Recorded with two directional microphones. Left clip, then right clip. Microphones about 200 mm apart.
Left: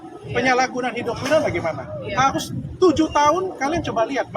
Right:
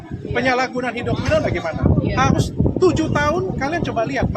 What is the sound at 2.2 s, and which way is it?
Speech, 15° right (ahead or behind).